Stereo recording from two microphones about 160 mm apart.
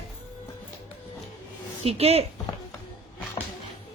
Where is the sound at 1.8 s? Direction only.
40° right (ahead or behind).